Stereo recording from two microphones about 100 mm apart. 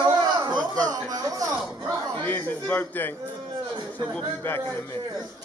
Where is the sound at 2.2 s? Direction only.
20° left (ahead or behind).